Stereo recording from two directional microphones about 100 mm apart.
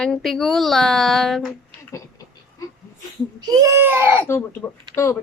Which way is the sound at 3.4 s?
40° right (ahead or behind).